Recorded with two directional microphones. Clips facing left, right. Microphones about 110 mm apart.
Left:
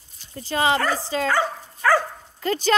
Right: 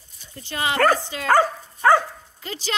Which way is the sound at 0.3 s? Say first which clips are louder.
Left 5 dB; 35° left (ahead or behind).